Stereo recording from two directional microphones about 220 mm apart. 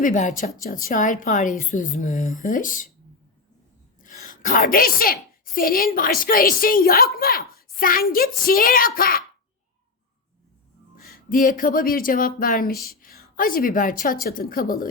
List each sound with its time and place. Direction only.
0.0 s speech: 35° left (ahead or behind)
4.0 s a woman's voice: 35° left (ahead or behind)
11.1 s speech: 40° left (ahead or behind)